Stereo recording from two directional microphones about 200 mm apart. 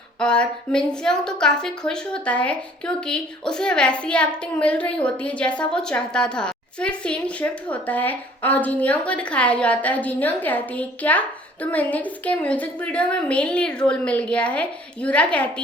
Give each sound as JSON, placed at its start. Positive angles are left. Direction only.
{"t": 0.2, "sound": "a woman's voice", "side_deg": 5}